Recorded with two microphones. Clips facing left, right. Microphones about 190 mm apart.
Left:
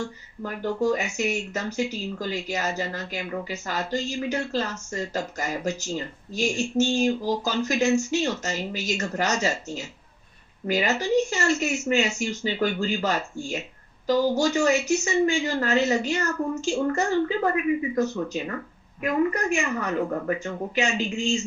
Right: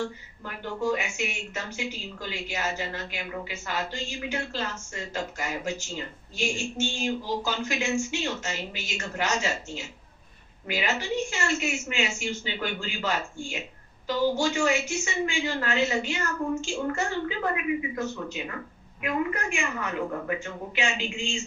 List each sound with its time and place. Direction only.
0.4 s speech: 40° left (ahead or behind)